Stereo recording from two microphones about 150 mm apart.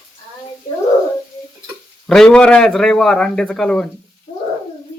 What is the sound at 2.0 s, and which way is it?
A man's voice, 5° left (ahead or behind).